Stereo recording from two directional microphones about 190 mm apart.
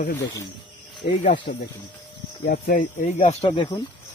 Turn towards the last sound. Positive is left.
turn(degrees=25)  # may be behind; listen again after turning